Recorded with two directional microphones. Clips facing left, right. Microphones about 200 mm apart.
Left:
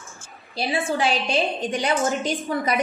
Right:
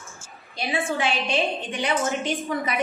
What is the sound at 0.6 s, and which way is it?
A woman's voice, 35° left (ahead or behind).